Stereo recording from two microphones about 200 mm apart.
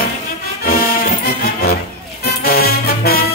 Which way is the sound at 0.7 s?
50° left (ahead or behind).